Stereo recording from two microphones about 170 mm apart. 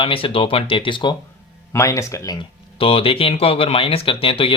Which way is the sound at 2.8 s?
35° left (ahead or behind).